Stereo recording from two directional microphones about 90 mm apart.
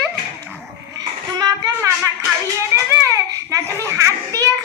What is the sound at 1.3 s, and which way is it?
A child's voice, 45° right (ahead or behind).